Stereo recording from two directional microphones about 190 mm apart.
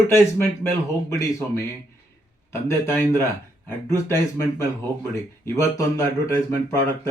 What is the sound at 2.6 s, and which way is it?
Speech, 15° left (ahead or behind).